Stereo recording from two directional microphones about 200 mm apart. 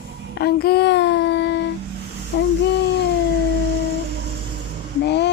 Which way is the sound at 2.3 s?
55° left (ahead or behind).